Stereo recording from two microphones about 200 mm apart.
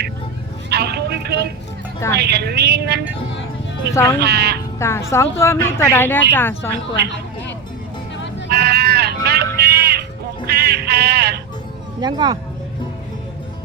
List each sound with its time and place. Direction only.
0.7 s vehicle: 55° right (ahead or behind)
2.1 s speech: 55° right (ahead or behind)
3.9 s speech: 15° left (ahead or behind)
4.2 s speech: 55° right (ahead or behind)
4.8 s speech: 15° left (ahead or behind)
8.4 s sheep: 55° right (ahead or behind)
9.6 s a sound: 55° right (ahead or behind)
11.9 s speech: 20° right (ahead or behind)